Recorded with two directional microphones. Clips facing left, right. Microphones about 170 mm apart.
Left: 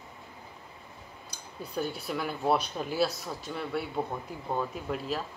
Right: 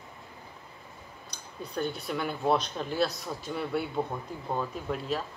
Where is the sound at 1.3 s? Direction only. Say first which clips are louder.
Even; 5° left (ahead or behind).